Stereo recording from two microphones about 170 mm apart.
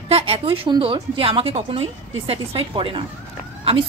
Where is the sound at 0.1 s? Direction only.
35° right (ahead or behind).